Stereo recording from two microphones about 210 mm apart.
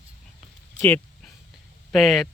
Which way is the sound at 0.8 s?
5° left (ahead or behind).